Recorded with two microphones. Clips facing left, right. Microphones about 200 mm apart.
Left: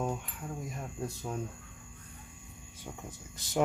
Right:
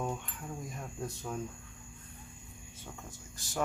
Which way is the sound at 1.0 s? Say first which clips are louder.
Left 2 dB; 5° left (ahead or behind).